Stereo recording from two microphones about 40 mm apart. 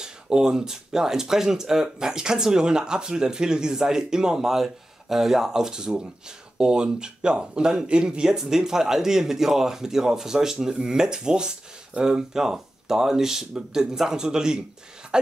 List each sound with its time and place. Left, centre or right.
0.0 s speech: centre